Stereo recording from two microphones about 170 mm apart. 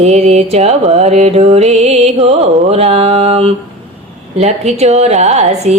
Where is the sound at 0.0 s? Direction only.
40° right (ahead or behind).